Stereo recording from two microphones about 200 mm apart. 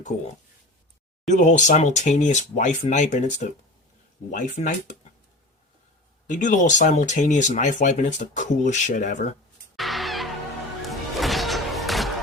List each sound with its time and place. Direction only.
1.3 s speech: 35° left (ahead or behind)
6.2 s speech: 40° left (ahead or behind)
9.7 s music: centre (ahead or behind)